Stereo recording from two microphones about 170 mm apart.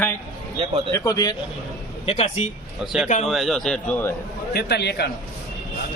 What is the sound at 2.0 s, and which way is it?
Speech, 40° left (ahead or behind).